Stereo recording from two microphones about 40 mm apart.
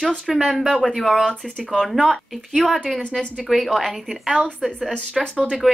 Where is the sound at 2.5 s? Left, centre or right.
Centre.